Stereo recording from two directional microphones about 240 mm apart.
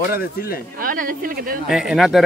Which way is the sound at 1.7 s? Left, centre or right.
Centre.